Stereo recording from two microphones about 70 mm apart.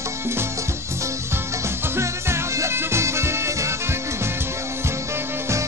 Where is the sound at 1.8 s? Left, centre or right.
Right.